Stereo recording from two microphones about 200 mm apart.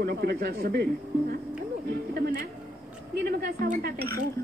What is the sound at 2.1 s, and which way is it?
Speech, 55° right (ahead or behind).